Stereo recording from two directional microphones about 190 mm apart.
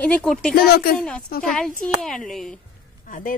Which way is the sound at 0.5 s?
55° left (ahead or behind).